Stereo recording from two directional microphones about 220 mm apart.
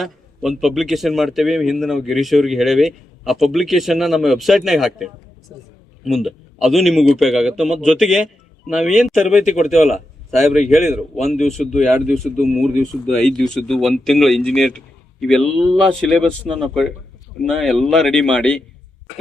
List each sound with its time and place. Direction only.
0.0 s speech: centre (ahead or behind)
11.6 s speech: 35° left (ahead or behind)
12.0 s speech: centre (ahead or behind)